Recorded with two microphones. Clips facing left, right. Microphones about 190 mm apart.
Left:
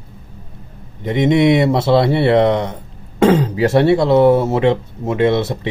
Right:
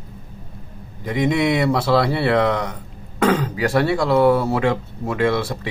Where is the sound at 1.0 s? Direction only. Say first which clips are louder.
Left 6 dB; 25° left (ahead or behind).